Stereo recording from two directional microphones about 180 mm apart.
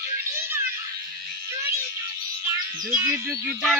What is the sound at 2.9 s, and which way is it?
Speech, 15° right (ahead or behind).